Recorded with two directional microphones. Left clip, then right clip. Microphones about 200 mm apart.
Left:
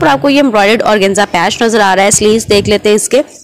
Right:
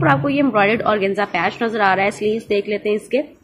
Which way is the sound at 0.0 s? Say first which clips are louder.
Left 8 dB; 50° left (ahead or behind).